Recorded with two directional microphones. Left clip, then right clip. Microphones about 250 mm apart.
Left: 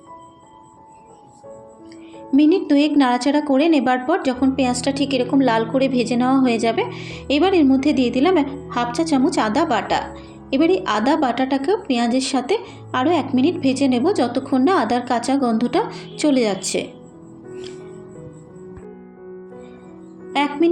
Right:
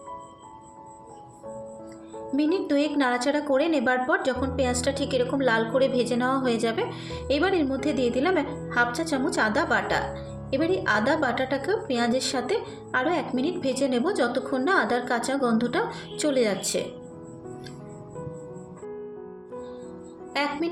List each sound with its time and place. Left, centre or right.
2.3 s a woman's voice: centre
20.3 s music: left